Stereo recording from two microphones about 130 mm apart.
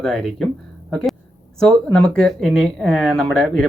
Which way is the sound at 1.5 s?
5° left (ahead or behind).